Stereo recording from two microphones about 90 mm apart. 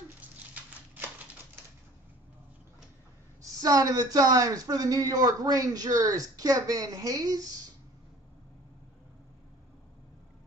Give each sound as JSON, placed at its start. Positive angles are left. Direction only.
{"t": 3.6, "sound": "a man's voice", "side_deg": -45}